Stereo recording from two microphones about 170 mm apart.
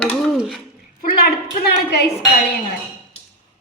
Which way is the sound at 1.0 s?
60° left (ahead or behind).